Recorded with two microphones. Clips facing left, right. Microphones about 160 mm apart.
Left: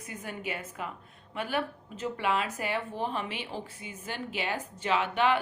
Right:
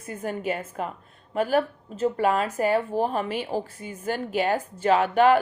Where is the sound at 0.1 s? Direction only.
45° right (ahead or behind).